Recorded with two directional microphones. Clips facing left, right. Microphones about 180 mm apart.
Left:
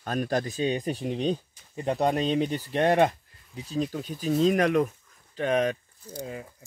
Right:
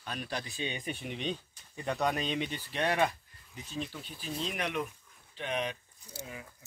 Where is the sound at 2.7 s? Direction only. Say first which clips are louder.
Left 8 dB; 50° left (ahead or behind).